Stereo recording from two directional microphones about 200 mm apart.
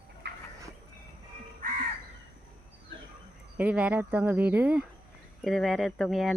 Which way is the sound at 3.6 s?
5° right (ahead or behind).